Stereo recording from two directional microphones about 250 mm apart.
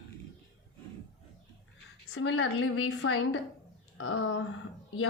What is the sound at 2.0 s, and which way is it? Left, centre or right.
A woman's voice, left.